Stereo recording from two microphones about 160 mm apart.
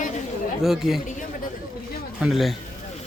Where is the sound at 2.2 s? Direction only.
Centre (ahead or behind).